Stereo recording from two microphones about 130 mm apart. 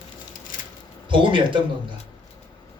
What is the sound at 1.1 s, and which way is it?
Speech, 40° right (ahead or behind).